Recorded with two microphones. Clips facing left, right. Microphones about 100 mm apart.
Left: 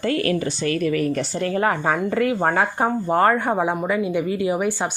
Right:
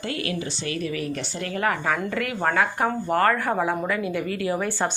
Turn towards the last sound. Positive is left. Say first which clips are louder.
# left 3 dB
turn(degrees=15)  # may be behind; listen again after turning